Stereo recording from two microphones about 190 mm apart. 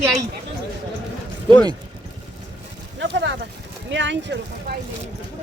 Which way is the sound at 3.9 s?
70° right (ahead or behind).